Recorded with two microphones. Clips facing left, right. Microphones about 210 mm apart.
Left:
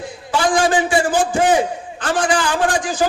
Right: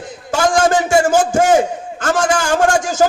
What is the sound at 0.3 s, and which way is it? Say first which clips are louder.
A man's voice: right 2 dB; 45° right (ahead or behind).